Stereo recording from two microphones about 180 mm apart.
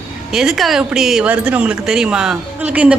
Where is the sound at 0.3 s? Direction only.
Centre (ahead or behind).